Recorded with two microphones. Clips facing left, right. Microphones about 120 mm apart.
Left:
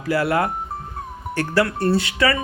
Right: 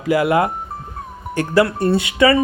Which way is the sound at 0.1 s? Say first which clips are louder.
Right 4 dB; 15° right (ahead or behind).